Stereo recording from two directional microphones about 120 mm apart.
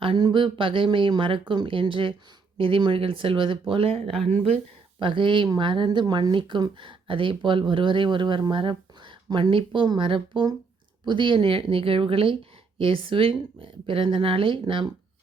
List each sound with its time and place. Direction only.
0.0 s speech: 40° right (ahead or behind)
4.1 s speech: 5° left (ahead or behind)
4.9 s speech: 45° right (ahead or behind)